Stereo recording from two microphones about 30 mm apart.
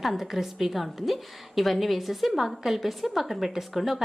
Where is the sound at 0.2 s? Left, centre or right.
Centre.